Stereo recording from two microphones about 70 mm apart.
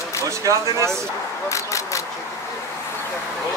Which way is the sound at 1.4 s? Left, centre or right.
Left.